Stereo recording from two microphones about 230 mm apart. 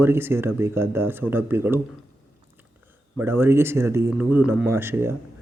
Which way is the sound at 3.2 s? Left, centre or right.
Centre.